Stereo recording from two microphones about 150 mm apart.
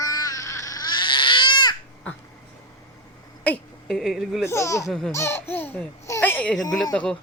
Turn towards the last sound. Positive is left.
turn(degrees=5)  # may be behind; listen again after turning